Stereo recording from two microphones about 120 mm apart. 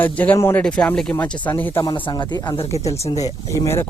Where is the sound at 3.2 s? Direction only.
25° left (ahead or behind).